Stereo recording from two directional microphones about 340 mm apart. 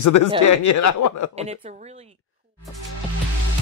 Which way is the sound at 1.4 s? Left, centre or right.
Centre.